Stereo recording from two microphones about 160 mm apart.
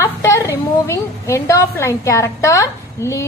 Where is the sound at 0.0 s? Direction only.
15° left (ahead or behind).